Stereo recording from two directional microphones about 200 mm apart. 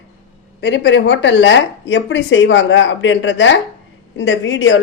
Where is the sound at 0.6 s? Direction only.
60° left (ahead or behind).